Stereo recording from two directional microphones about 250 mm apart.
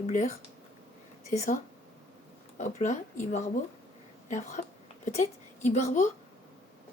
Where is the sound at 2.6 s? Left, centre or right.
Left.